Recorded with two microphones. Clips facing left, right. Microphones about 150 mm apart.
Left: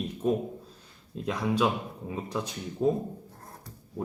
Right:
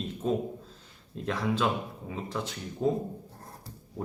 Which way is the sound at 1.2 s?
10° left (ahead or behind).